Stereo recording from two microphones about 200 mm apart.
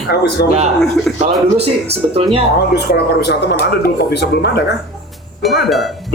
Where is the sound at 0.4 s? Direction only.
55° left (ahead or behind).